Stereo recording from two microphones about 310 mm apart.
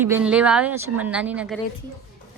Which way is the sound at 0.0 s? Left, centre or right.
Centre.